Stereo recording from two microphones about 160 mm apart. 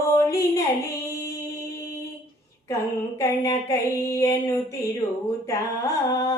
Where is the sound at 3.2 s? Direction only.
20° left (ahead or behind).